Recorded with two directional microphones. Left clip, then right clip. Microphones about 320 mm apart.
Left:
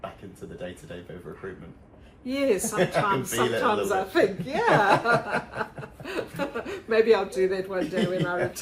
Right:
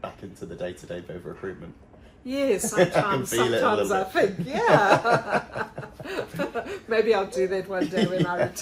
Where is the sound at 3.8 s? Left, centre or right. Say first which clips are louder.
Even; centre.